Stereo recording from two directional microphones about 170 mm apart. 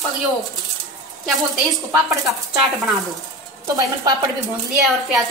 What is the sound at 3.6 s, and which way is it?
Speech, 20° right (ahead or behind).